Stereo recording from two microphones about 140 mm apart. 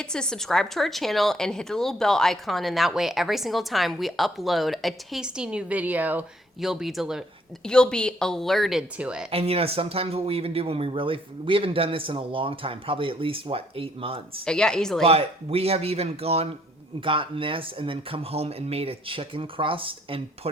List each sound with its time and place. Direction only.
0.0 s a woman's voice: 5° left (ahead or behind)
9.3 s speech: 45° right (ahead or behind)
14.4 s a woman's voice: 5° left (ahead or behind)
15.0 s speech: 45° right (ahead or behind)